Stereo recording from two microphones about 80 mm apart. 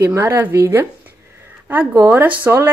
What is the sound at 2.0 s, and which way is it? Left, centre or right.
Speech, right.